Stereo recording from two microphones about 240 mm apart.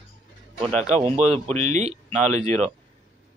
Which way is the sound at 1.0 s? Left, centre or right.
Right.